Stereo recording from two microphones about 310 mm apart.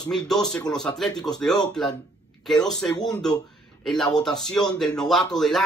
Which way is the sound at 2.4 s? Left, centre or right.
Centre.